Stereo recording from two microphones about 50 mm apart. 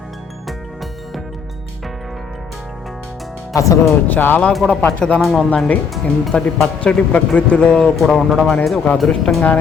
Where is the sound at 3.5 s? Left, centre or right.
Left.